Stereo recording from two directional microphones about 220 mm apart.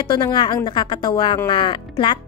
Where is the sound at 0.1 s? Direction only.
20° left (ahead or behind).